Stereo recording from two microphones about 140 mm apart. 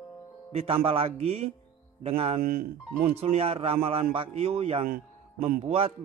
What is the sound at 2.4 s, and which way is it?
Speech, 90° right.